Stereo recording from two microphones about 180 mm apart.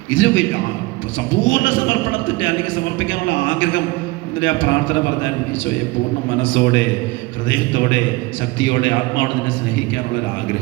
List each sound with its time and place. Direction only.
0.1 s a man's voice: 90° left
6.4 s a man's voice: 85° left